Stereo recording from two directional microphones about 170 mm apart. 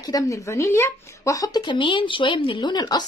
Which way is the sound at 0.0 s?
20° left (ahead or behind).